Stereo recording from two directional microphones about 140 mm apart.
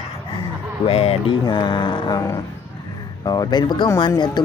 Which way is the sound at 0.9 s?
45° left (ahead or behind).